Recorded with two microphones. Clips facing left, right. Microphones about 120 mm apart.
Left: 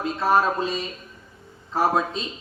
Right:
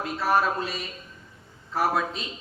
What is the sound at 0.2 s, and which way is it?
Speech, 20° left (ahead or behind).